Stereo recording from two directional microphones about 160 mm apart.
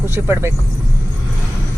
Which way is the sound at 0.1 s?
15° right (ahead or behind).